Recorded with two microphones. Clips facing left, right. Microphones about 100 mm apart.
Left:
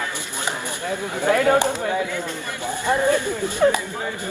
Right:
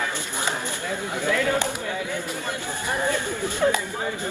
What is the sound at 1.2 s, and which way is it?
Speech, 55° left (ahead or behind).